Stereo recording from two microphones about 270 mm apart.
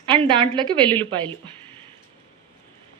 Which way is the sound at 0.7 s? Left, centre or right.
Centre.